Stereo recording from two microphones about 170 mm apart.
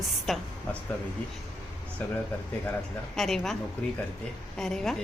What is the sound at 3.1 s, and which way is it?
Speech, centre (ahead or behind).